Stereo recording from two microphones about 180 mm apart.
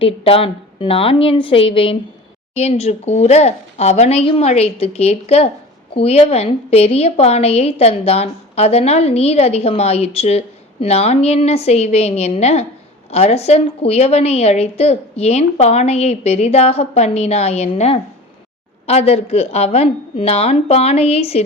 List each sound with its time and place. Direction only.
0.0 s a woman's voice: 30° left (ahead or behind)